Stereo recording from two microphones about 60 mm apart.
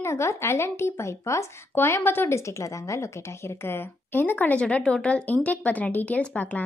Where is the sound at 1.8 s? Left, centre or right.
Left.